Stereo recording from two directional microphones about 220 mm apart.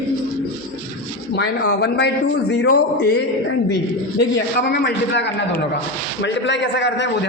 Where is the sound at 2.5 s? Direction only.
50° left (ahead or behind).